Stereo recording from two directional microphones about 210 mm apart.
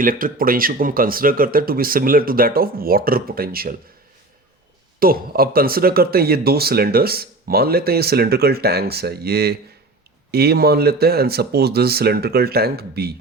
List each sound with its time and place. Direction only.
0.0 s speech: 40° right (ahead or behind)
4.9 s speech: 45° right (ahead or behind)